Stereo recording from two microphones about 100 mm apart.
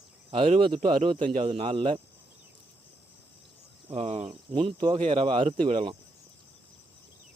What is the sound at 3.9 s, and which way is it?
Speech, 85° right.